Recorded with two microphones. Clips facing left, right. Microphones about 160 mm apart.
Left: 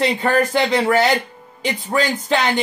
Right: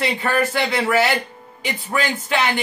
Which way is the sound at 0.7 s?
35° left (ahead or behind).